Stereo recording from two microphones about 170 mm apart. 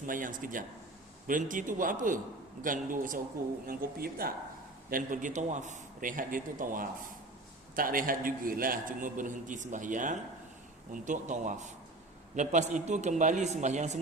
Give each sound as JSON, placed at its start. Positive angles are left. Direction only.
{"t": 0.0, "sound": "a man's voice", "side_deg": -50}